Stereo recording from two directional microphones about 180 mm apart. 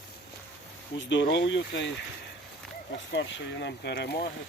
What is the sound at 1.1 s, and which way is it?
Speech, 85° left.